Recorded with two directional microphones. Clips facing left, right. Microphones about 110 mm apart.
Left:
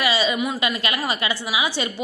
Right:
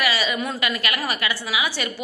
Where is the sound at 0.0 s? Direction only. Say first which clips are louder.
Left 2 dB; 20° left (ahead or behind).